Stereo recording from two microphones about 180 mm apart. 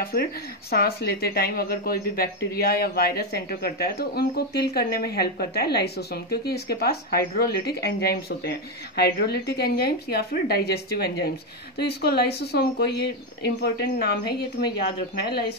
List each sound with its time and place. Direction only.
0.0 s speech: 55° left (ahead or behind)